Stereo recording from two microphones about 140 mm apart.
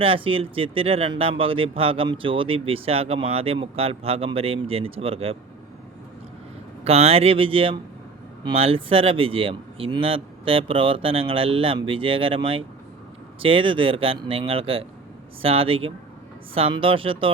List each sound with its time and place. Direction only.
0.0 s speech: 40° right (ahead or behind)
6.8 s speech: 45° right (ahead or behind)